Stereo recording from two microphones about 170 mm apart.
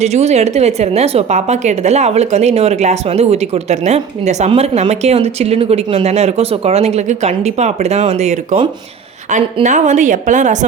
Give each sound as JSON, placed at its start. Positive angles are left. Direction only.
{"t": 0.0, "sound": "a woman's voice", "side_deg": -40}
{"t": 9.6, "sound": "a woman's voice", "side_deg": -45}